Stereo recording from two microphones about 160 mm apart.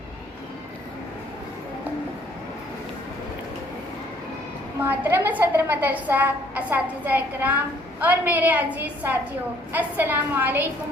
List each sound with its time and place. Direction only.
4.8 s a woman's voice: 15° right (ahead or behind)